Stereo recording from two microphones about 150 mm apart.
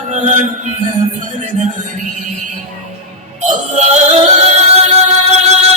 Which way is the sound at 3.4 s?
55° right (ahead or behind).